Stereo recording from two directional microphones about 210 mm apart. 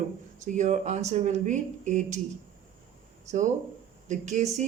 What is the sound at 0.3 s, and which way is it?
Speech, 35° right (ahead or behind).